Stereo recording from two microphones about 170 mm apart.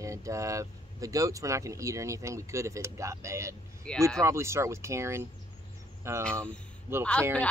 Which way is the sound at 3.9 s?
5° left (ahead or behind).